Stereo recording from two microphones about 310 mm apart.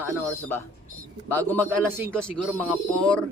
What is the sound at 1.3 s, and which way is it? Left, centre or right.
Speech, centre.